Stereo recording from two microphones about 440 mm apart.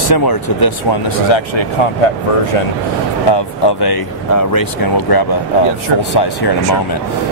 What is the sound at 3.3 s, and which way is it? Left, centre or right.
Speech, left.